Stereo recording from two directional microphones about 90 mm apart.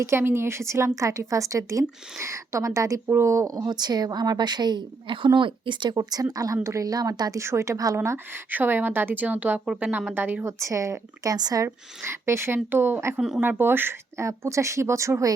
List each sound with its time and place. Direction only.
0.0 s a woman's voice: 25° right (ahead or behind); by 6.1 s 60° right (ahead or behind)
6.3 s a woman's voice: 40° right (ahead or behind); by 10.5 s 20° right (ahead or behind)
10.6 s a woman's voice: 35° right (ahead or behind)
11.6 s a woman's voice: 30° right (ahead or behind)
13.1 s speech: 5° right (ahead or behind)
13.4 s a woman's voice: 25° right (ahead or behind)